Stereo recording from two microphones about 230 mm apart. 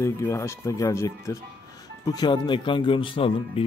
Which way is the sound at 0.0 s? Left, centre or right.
Centre.